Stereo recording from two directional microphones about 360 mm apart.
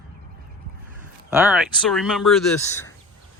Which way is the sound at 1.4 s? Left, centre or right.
Centre.